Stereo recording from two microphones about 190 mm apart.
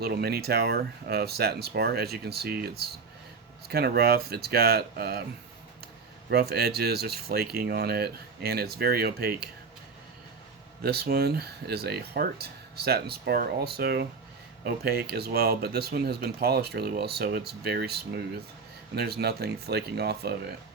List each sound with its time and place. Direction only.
0.0 s speech: 55° right (ahead or behind)
6.3 s speech: 55° right (ahead or behind)
10.8 s speech: 55° right (ahead or behind)